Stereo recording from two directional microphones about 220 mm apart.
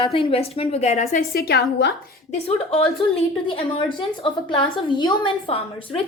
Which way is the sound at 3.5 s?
25° left (ahead or behind).